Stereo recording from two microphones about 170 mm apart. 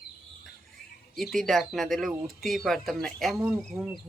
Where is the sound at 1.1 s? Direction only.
Centre (ahead or behind).